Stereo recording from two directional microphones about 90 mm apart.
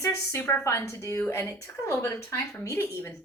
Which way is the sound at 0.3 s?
25° left (ahead or behind).